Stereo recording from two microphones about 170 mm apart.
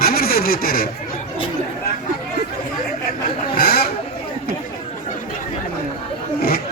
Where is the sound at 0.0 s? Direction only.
65° left (ahead or behind).